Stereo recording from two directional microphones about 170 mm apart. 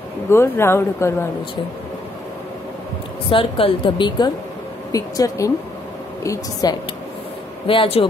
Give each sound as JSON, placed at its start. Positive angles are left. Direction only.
{"t": 0.3, "sound": "speech", "side_deg": 15}
{"t": 3.3, "sound": "a woman's voice", "side_deg": 30}
{"t": 7.6, "sound": "a woman's voice", "side_deg": 30}